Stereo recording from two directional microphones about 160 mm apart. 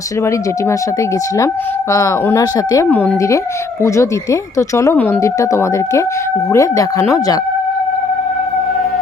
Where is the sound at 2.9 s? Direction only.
10° left (ahead or behind).